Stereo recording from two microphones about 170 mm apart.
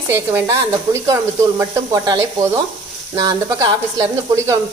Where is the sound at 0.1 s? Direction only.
15° right (ahead or behind).